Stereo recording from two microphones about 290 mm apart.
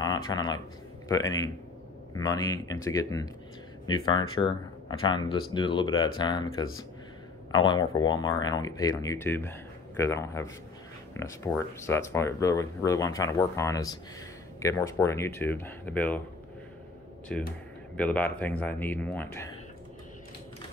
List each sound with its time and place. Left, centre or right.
0.0 s speech: centre
17.3 s speech: centre